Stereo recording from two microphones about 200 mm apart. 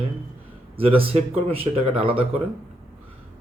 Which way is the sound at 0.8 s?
30° right (ahead or behind).